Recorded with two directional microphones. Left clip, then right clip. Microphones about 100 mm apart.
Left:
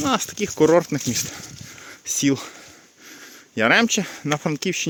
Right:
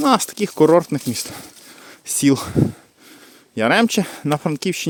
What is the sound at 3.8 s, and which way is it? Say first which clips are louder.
Speech: right 2 dB; 60° right (ahead or behind).